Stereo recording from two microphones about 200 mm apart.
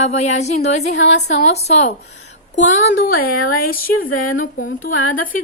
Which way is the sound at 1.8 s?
60° left (ahead or behind).